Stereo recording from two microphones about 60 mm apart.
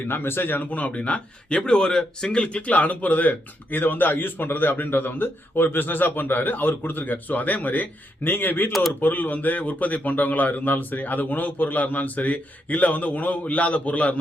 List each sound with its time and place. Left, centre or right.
0.1 s a man's voice: left
8.7 s speech: centre
9.0 s speech: left